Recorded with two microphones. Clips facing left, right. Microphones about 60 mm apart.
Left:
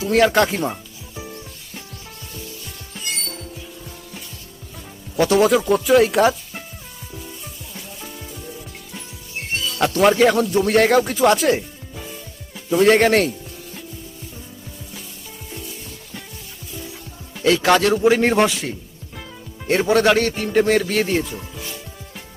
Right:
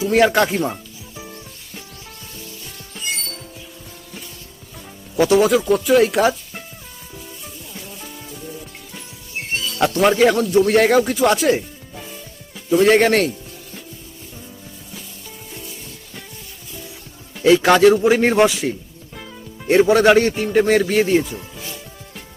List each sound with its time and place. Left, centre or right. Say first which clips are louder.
0.1 s speech: even; centre
5.1 s speech: right 1 dB; centre
9.8 s speech: even; centre
17.4 s a man's voice: right 4 dB; centre